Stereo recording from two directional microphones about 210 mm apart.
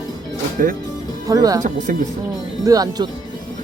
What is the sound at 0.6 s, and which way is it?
Speech, 40° right (ahead or behind).